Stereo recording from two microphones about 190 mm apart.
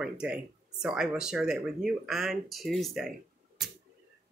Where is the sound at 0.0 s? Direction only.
5° right (ahead or behind).